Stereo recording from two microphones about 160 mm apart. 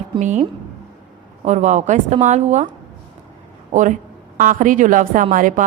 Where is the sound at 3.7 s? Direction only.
50° right (ahead or behind).